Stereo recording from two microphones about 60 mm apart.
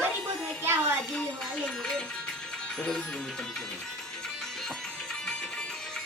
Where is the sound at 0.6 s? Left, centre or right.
Right.